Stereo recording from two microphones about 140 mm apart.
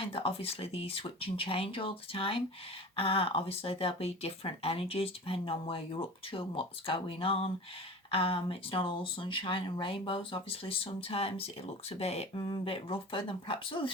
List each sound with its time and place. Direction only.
0.0 s speech: 40° left (ahead or behind)